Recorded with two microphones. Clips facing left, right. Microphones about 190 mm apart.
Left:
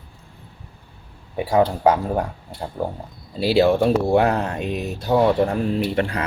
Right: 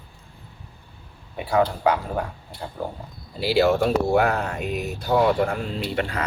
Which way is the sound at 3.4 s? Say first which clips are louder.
Left 3 dB; 20° left (ahead or behind).